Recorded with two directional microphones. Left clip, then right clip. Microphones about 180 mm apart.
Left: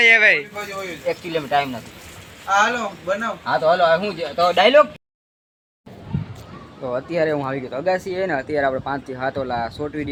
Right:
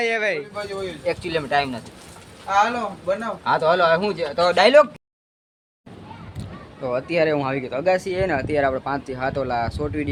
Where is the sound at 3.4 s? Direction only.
20° right (ahead or behind).